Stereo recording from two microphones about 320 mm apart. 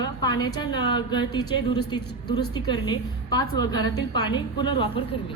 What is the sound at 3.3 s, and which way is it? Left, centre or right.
A woman's voice, centre.